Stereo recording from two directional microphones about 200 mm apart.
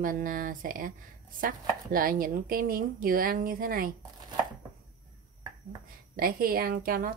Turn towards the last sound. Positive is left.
turn(degrees=-45)  # may be behind; listen again after turning